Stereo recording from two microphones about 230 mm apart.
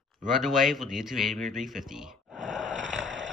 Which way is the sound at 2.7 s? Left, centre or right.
Right.